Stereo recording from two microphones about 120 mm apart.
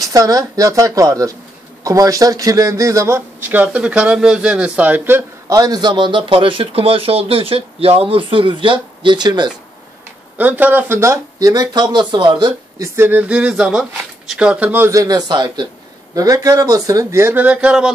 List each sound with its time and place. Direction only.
0.0 s a man's voice: 30° right (ahead or behind)
5.5 s speech: 30° right (ahead or behind)
10.3 s speech: 15° right (ahead or behind); by 12.8 s 40° right (ahead or behind)
12.8 s a man's voice: 20° right (ahead or behind)
14.9 s speech: 30° right (ahead or behind); by 17.9 s 5° right (ahead or behind)